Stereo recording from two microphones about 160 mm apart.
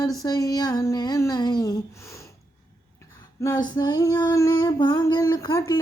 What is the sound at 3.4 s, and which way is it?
Female singing, 25° left (ahead or behind).